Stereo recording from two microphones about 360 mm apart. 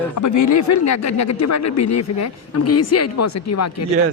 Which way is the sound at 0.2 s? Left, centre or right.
Left.